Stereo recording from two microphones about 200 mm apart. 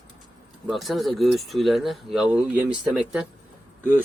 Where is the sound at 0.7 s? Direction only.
Centre (ahead or behind).